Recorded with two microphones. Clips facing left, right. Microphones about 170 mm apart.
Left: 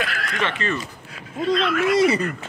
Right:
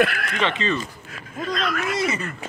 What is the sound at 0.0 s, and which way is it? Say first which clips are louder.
Speech: right 7 dB; 55° right (ahead or behind).